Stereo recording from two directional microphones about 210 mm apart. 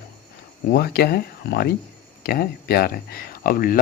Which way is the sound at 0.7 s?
45° left (ahead or behind).